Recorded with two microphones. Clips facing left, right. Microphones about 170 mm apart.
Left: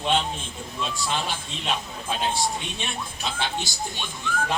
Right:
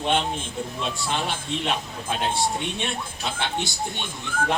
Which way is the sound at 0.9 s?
60° right (ahead or behind).